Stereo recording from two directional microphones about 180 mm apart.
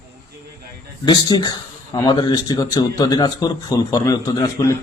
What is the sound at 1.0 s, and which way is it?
A man's voice, 25° left (ahead or behind).